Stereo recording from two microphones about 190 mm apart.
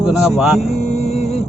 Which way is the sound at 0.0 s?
5° right (ahead or behind).